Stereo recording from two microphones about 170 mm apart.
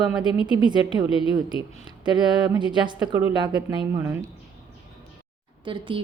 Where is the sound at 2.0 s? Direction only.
25° right (ahead or behind).